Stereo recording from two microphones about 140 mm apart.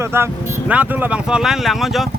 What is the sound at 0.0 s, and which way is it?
A man's voice, 15° right (ahead or behind).